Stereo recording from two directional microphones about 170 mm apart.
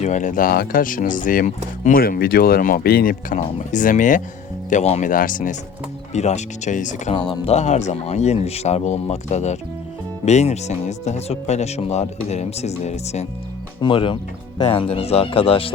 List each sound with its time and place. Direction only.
0.0 s speech: 45° left (ahead or behind)
7.1 s speech: 30° left (ahead or behind)
13.8 s speech: 30° left (ahead or behind)